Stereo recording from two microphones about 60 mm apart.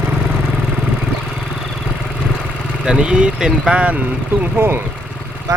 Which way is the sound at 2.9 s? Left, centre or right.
Centre.